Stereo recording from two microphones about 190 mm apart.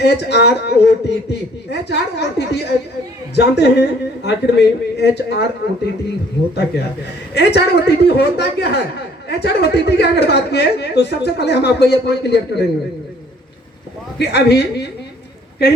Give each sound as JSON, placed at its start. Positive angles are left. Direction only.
{"t": 0.0, "sound": "a woman's voice", "side_deg": 60}
{"t": 7.3, "sound": "a woman's voice", "side_deg": 60}
{"t": 14.2, "sound": "a woman's voice", "side_deg": 60}